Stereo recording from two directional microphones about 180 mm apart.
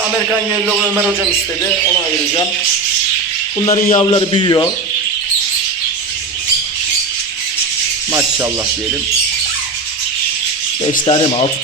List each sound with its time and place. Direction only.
3.7 s a man's voice: 35° left (ahead or behind)
11.0 s a man's voice: 30° left (ahead or behind)